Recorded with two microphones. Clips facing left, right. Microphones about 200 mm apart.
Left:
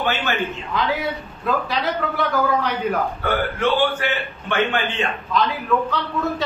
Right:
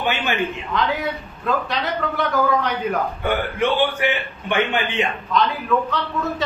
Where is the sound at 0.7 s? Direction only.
Centre (ahead or behind).